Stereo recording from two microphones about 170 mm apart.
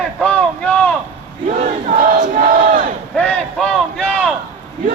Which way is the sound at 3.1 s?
10° left (ahead or behind).